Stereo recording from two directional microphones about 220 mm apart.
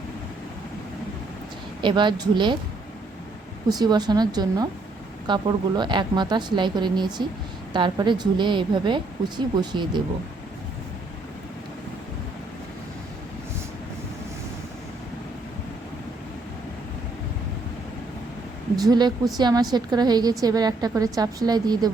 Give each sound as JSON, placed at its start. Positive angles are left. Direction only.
{"t": 1.8, "sound": "speech", "side_deg": -20}
{"t": 3.7, "sound": "a woman's voice", "side_deg": -20}
{"t": 18.8, "sound": "a woman's voice", "side_deg": -20}